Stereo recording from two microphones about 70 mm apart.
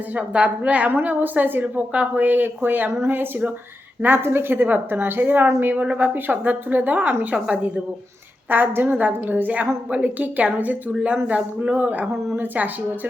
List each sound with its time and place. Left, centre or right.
0.1 s a woman's voice: right
8.4 s a woman's voice: right